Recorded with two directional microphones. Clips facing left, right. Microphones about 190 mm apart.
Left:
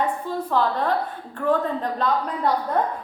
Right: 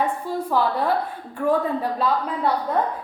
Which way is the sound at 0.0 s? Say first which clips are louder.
Right 1 dB; 10° right (ahead or behind).